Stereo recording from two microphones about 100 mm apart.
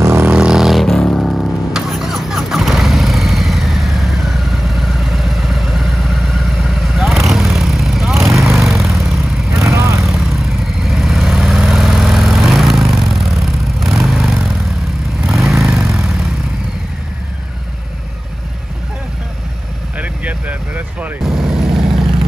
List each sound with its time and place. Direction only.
0.0 s vehicle: 25° right (ahead or behind)
0.3 s vehicle: 10° right (ahead or behind)
9.6 s vehicle: 30° right (ahead or behind)
10.0 s vehicle: centre (ahead or behind)
20.0 s vehicle: 15° right (ahead or behind)
21.2 s vehicle: 5° right (ahead or behind)